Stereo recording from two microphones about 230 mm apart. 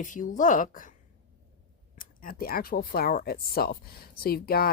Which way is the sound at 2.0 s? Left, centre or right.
Left.